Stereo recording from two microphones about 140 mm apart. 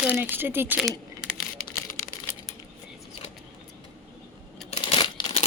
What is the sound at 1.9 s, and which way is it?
Crumpling, 20° left (ahead or behind).